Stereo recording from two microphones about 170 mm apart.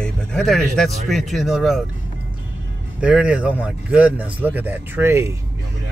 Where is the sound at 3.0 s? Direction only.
5° right (ahead or behind).